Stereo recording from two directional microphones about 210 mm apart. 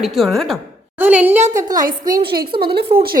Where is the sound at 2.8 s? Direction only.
25° right (ahead or behind).